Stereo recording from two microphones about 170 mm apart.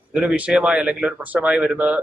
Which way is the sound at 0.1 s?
5° right (ahead or behind).